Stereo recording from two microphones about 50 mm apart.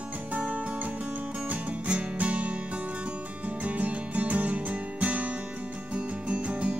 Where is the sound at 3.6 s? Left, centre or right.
Right.